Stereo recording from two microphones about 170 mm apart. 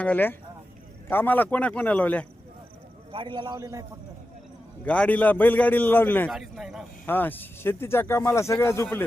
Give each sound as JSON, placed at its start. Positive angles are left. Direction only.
{"t": 0.0, "sound": "speech", "side_deg": 10}
{"t": 3.1, "sound": "a man's voice", "side_deg": -30}
{"t": 4.9, "sound": "speech", "side_deg": 10}
{"t": 6.3, "sound": "a man's voice", "side_deg": 0}
{"t": 7.0, "sound": "speech", "side_deg": 10}